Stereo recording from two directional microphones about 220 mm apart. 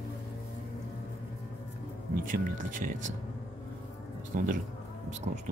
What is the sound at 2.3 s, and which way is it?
Speech, 35° right (ahead or behind).